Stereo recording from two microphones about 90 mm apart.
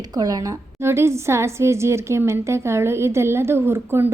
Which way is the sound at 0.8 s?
30° right (ahead or behind).